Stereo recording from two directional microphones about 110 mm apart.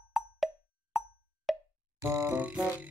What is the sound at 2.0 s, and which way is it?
Music, 25° right (ahead or behind).